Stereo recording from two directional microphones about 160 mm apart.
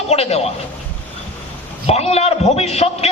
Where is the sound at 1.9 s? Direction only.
40° left (ahead or behind).